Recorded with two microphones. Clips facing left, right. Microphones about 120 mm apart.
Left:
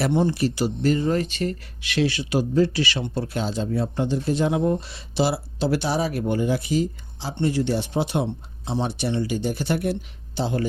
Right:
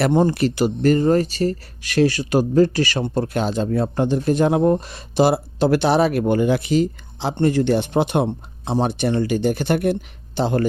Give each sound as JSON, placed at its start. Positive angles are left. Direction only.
{"t": 0.0, "sound": "speech", "side_deg": -50}
{"t": 7.3, "sound": "speech", "side_deg": -55}